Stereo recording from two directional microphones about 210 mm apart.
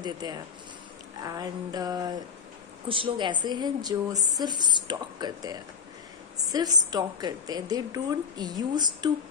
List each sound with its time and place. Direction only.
0.0 s a woman's voice: 20° right (ahead or behind)
1.2 s music: 20° right (ahead or behind)
2.9 s a woman's voice: 25° right (ahead or behind)